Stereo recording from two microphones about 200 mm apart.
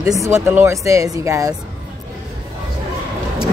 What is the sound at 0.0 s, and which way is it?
A woman's voice, 15° right (ahead or behind).